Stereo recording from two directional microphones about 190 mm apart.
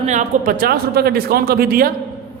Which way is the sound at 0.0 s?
40° right (ahead or behind).